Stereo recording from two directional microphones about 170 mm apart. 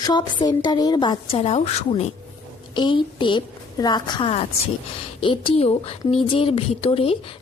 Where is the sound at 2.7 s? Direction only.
25° left (ahead or behind).